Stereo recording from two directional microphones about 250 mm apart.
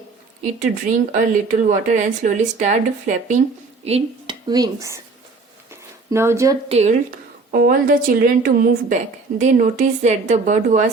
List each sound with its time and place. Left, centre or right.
0.6 s speech: right; by 4.9 s centre
6.1 s a woman's voice: centre
6.7 s a woman's voice: right